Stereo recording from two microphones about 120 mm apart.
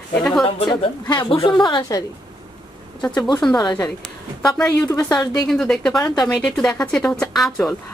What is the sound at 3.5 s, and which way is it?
A woman's voice, 35° left (ahead or behind).